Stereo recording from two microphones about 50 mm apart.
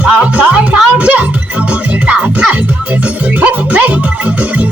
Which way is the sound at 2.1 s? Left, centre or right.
Centre.